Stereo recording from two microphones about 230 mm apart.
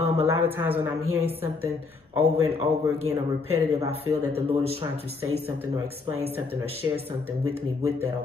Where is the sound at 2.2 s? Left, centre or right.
Right.